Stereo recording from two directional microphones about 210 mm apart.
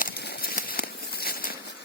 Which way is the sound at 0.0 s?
50° left (ahead or behind).